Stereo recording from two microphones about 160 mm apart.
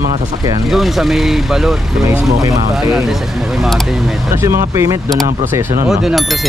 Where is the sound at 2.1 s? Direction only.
20° right (ahead or behind).